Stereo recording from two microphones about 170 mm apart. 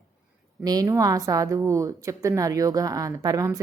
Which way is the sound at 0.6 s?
20° right (ahead or behind).